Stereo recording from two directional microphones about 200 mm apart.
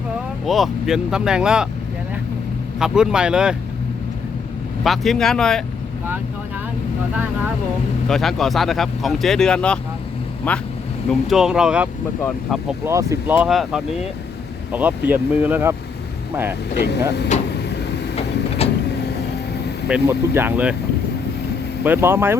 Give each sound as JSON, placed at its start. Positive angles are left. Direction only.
{"t": 0.4, "sound": "speech", "side_deg": 0}
{"t": 2.7, "sound": "speech", "side_deg": -5}
{"t": 4.8, "sound": "speech", "side_deg": 0}
{"t": 8.0, "sound": "speech", "side_deg": 0}
{"t": 12.9, "sound": "speech", "side_deg": -15}
{"t": 16.8, "sound": "speech", "side_deg": 55}
{"t": 18.2, "sound": "vehicle", "side_deg": 30}
{"t": 19.9, "sound": "speech", "side_deg": -10}
{"t": 21.8, "sound": "speech", "side_deg": -10}